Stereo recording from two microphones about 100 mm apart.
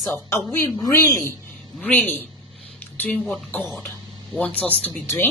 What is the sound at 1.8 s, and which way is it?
Speech, 15° left (ahead or behind).